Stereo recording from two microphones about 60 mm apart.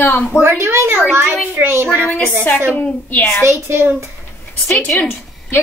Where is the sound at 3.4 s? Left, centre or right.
Right.